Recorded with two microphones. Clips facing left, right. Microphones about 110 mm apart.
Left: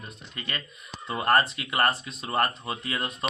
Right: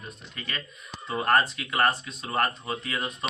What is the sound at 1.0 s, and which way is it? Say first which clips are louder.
Speech: even; centre (ahead or behind).